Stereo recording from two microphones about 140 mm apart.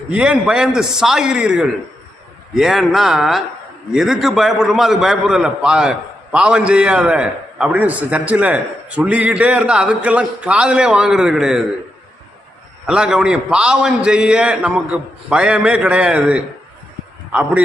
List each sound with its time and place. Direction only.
0.1 s a man's voice: 10° right (ahead or behind)
12.8 s a man's voice: 5° right (ahead or behind)